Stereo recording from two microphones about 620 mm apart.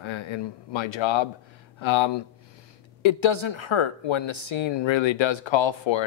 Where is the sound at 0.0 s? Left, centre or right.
Left.